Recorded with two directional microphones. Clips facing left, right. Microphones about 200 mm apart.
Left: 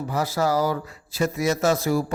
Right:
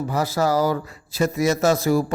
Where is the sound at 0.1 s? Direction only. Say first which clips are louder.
Right 1 dB; 40° right (ahead or behind).